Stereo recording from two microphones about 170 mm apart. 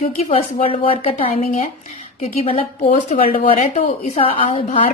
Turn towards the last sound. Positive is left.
turn(degrees=30)  # may be behind; listen again after turning